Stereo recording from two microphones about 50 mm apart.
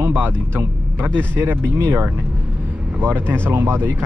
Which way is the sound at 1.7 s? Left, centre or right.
Right.